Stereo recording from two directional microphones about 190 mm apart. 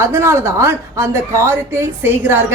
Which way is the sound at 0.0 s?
15° right (ahead or behind).